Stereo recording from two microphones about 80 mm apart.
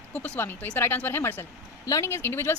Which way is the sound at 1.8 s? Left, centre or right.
Left.